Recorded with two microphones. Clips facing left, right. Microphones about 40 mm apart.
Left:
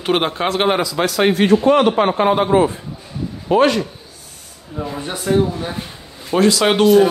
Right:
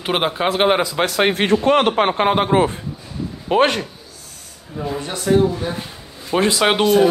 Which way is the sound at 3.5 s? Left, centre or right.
Right.